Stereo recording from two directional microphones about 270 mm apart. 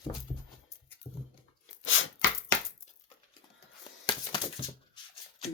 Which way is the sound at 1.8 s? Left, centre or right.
Left.